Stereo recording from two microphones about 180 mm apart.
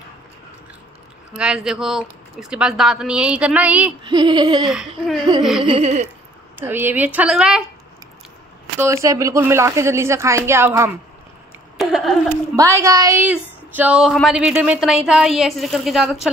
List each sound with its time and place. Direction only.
1.3 s speech: 5° right (ahead or behind)
4.0 s speech: 25° right (ahead or behind)
4.6 s speech: centre (ahead or behind)
5.6 s a sound: 35° right (ahead or behind)
6.6 s a woman's voice: 10° right (ahead or behind)
8.7 s a woman's voice: 15° right (ahead or behind)
11.7 s a sound: centre (ahead or behind)
12.5 s speech: 15° right (ahead or behind)